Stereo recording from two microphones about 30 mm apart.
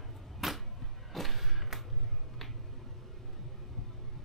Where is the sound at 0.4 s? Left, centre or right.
Centre.